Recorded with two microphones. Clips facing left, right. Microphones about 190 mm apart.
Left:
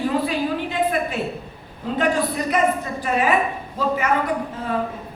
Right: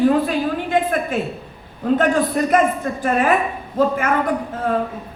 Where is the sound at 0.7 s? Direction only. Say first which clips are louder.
Right 4 dB; 50° right (ahead or behind).